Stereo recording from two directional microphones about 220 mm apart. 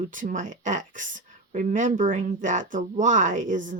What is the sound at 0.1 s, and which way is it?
Speech, 35° right (ahead or behind).